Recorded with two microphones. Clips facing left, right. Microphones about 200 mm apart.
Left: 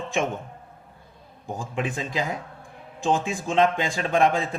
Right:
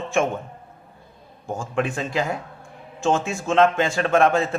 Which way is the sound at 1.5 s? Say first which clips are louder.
Right 5 dB; 15° left (ahead or behind).